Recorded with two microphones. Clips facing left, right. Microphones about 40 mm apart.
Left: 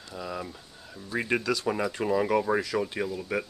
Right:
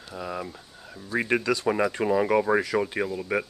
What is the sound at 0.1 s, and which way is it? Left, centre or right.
Speech, centre.